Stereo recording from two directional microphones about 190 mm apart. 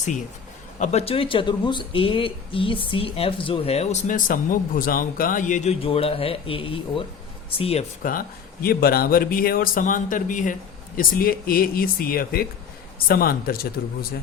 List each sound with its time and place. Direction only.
0.8 s speech: 35° left (ahead or behind)
8.6 s speech: 55° left (ahead or behind)